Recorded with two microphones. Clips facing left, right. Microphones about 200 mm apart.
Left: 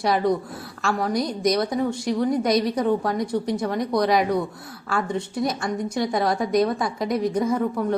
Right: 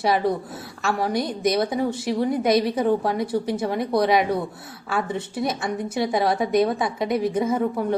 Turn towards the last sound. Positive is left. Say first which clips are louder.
# even
turn(degrees=-5)  # may be behind; listen again after turning